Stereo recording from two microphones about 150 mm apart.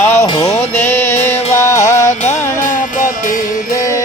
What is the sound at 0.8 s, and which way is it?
Music, 15° left (ahead or behind).